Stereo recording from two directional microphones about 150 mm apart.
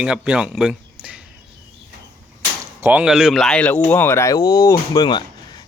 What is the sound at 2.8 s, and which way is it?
Speech, 10° right (ahead or behind).